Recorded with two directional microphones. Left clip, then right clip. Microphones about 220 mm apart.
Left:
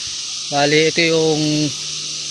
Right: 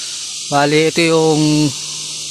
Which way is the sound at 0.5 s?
35° right (ahead or behind).